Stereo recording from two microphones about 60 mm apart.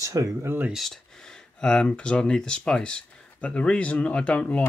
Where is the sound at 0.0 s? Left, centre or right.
Right.